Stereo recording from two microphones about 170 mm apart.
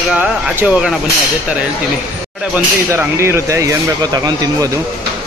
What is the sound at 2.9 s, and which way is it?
Speech, 15° right (ahead or behind).